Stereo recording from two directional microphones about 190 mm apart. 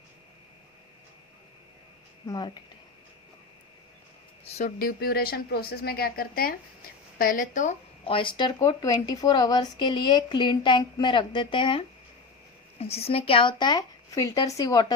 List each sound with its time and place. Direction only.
2.2 s speech: 20° left (ahead or behind)
4.4 s speech: 35° left (ahead or behind)
4.8 s a woman's voice: 50° left (ahead or behind)
8.0 s speech: 25° left (ahead or behind)